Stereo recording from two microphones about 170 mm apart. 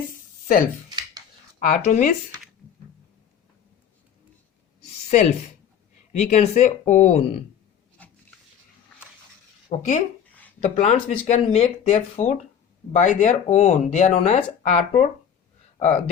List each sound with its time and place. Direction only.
0.4 s speech: 55° left (ahead or behind)
0.9 s a sound: 25° right (ahead or behind)
1.5 s speech: 45° left (ahead or behind)
6.1 s speech: 45° left (ahead or behind)
9.6 s speech: 45° left (ahead or behind)
14.2 s speech: 35° left (ahead or behind)